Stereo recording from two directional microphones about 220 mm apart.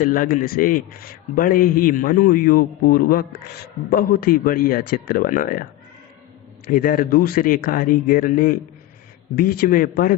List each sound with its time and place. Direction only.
0.0 s a man's voice: 40° left (ahead or behind)
6.7 s a man's voice: 40° left (ahead or behind)